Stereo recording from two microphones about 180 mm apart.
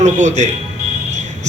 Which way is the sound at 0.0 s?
40° right (ahead or behind).